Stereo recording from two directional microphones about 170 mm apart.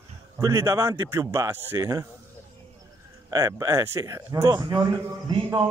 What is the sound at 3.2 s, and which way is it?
Speech, 20° right (ahead or behind).